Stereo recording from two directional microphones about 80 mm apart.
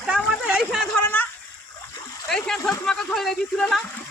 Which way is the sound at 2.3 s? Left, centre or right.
Centre.